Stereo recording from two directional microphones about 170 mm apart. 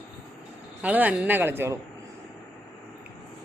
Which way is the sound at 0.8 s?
10° right (ahead or behind).